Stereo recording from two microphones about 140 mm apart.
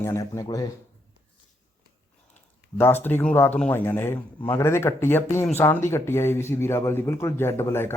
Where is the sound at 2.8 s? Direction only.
15° left (ahead or behind).